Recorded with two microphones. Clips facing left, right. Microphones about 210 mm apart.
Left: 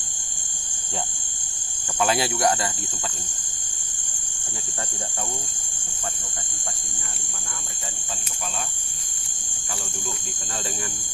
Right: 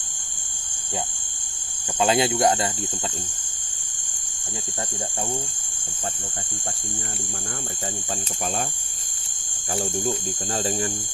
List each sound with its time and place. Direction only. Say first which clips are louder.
2.0 s speech: right 3 dB; 20° right (ahead or behind)
9.7 s speech: right 10 dB; 35° right (ahead or behind)